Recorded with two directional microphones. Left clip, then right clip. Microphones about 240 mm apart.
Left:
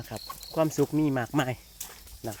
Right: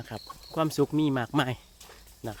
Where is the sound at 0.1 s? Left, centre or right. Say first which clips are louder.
Left 2 dB; centre.